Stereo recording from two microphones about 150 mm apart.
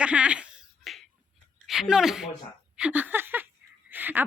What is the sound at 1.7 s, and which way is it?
Speech, 5° right (ahead or behind).